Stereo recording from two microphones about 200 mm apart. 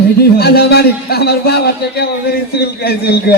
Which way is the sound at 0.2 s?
50° left (ahead or behind).